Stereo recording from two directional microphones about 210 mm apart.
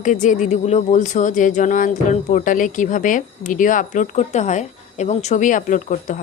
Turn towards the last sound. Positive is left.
turn(degrees=35)  # may be behind; listen again after turning